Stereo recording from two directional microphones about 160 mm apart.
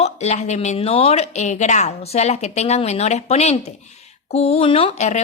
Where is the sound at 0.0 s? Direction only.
45° left (ahead or behind).